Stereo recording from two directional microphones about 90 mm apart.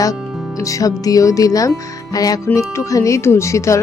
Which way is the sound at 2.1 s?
45° left (ahead or behind).